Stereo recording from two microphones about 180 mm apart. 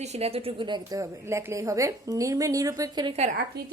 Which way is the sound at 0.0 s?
35° right (ahead or behind).